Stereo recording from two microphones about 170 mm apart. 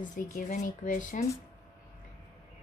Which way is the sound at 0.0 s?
50° left (ahead or behind).